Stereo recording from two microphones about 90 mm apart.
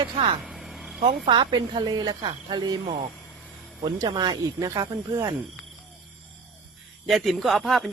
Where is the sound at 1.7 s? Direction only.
50° right (ahead or behind).